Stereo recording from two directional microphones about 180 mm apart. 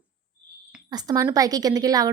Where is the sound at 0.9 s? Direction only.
20° right (ahead or behind).